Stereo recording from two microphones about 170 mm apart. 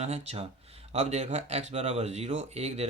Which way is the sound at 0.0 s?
40° right (ahead or behind).